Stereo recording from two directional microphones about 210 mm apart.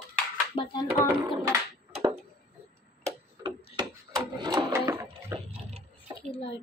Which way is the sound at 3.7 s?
20° right (ahead or behind).